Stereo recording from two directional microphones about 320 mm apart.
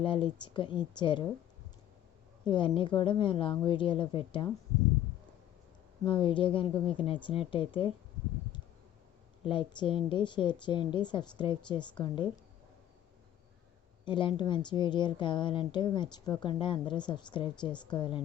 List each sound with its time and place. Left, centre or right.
0.0 s a woman's voice: centre
2.4 s a woman's voice: centre
6.1 s a woman's voice: centre
9.4 s a woman's voice: centre
14.0 s a woman's voice: centre